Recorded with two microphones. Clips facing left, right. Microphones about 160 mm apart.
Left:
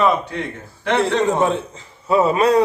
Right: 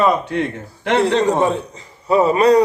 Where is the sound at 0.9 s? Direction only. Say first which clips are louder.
Right 2 dB; 25° right (ahead or behind).